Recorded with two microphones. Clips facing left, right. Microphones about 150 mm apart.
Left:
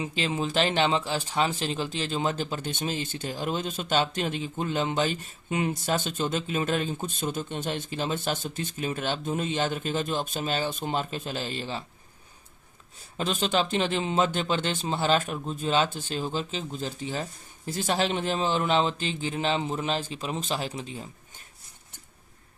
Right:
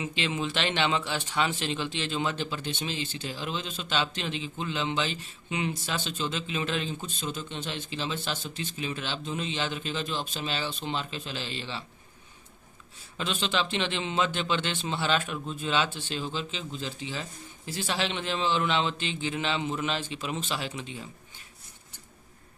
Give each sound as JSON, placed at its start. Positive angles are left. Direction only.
{"t": 0.0, "sound": "speech", "side_deg": 35}
{"t": 13.1, "sound": "speech", "side_deg": 40}